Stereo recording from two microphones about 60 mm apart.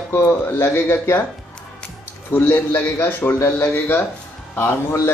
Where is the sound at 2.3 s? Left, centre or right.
Left.